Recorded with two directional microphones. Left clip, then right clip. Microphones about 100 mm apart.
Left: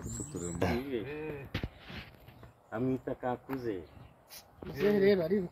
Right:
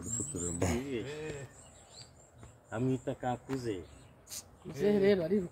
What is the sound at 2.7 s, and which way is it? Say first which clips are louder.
Speech: left 1 dB; 35° right (ahead or behind).